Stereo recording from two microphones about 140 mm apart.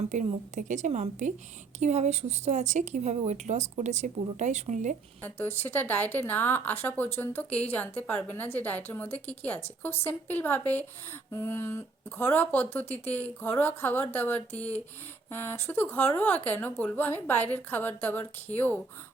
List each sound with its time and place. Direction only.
0.1 s speech: 60° right (ahead or behind)
5.6 s speech: 15° left (ahead or behind)